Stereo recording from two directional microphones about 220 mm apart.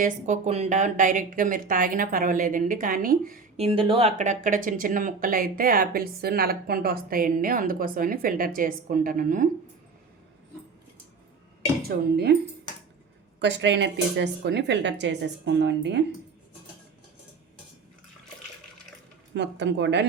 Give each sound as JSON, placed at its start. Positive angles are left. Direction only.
{"t": 0.0, "sound": "speech", "side_deg": -30}
{"t": 3.6, "sound": "speech", "side_deg": -25}
{"t": 11.8, "sound": "speech", "side_deg": -45}
{"t": 13.4, "sound": "speech", "side_deg": -55}
{"t": 19.3, "sound": "speech", "side_deg": -50}